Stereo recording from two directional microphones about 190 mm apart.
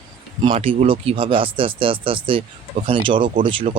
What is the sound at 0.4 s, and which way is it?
Speech, 30° right (ahead or behind).